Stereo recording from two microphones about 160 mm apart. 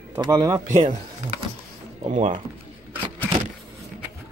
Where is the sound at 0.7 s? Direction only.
50° right (ahead or behind).